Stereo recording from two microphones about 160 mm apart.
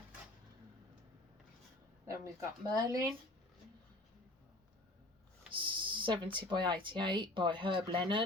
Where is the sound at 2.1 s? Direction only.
20° right (ahead or behind).